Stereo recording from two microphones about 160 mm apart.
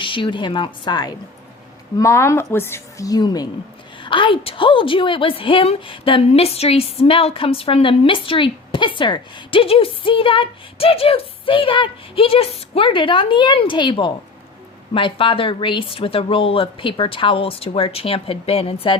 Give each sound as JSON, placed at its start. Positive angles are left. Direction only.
{"t": 0.0, "sound": "a woman's voice", "side_deg": 30}